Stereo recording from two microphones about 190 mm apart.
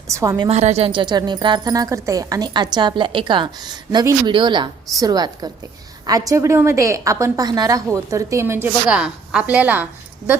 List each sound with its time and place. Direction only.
0.1 s a woman's voice: 15° right (ahead or behind)
0.4 s a woman's voice: 35° right (ahead or behind); by 9.8 s 5° right (ahead or behind)